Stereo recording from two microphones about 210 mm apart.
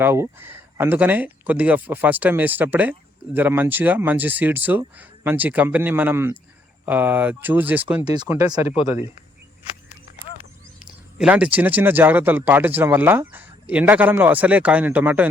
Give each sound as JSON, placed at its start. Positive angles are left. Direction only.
{"t": 0.0, "sound": "speech", "side_deg": -10}
{"t": 8.0, "sound": "speech", "side_deg": -20}
{"t": 10.8, "sound": "speech", "side_deg": -5}